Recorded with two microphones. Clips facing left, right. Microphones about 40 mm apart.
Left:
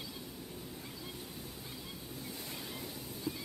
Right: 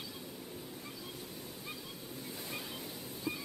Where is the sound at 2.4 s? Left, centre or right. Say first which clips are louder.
Right 1 dB; centre.